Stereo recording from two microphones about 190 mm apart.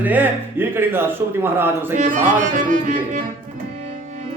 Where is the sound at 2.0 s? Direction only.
40° right (ahead or behind).